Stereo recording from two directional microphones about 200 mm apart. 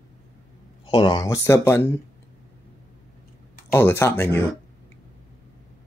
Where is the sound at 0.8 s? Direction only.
20° left (ahead or behind).